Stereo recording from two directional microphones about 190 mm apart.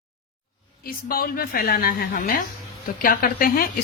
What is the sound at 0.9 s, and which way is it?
A woman's voice, 50° left (ahead or behind).